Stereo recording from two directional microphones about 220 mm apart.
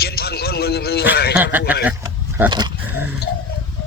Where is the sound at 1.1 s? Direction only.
50° left (ahead or behind).